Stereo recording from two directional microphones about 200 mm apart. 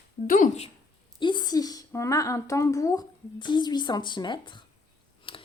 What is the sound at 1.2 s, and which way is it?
A woman's voice, 25° left (ahead or behind).